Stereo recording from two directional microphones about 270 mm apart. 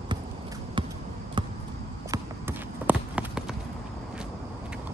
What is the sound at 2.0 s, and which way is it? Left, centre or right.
Clip-clop, centre.